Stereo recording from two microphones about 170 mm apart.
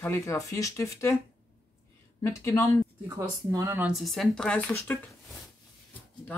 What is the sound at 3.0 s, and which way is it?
Speech, 20° right (ahead or behind).